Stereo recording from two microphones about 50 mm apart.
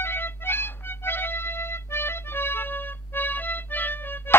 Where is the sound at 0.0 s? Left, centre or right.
Left.